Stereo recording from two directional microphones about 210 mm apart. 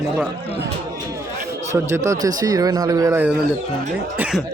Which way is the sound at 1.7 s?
15° right (ahead or behind).